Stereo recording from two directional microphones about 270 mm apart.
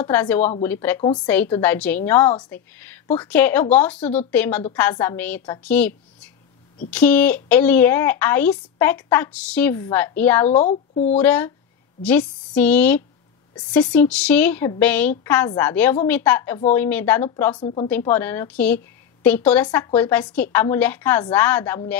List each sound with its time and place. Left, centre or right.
0.0 s a woman's voice: centre
10.6 s speech: left
11.1 s a woman's voice: centre